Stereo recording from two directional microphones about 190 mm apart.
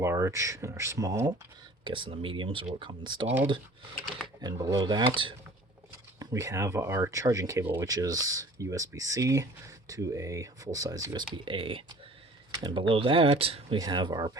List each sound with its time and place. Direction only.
0.0 s speech: 15° right (ahead or behind)
4.4 s speech: 20° right (ahead or behind)